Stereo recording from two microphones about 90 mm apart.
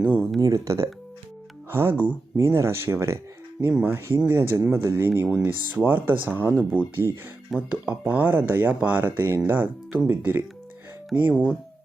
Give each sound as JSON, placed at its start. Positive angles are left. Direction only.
{"t": 0.3, "sound": "speech", "side_deg": -40}